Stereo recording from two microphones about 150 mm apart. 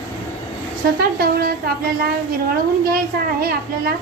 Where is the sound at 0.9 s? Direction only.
90° right.